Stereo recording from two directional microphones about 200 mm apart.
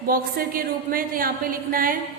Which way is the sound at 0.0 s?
45° right (ahead or behind).